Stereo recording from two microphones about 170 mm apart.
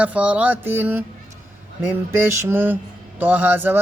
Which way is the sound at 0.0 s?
10° right (ahead or behind).